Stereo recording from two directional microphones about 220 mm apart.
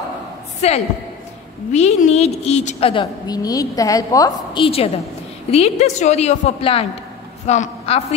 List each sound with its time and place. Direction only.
0.6 s a woman's voice: 30° left (ahead or behind)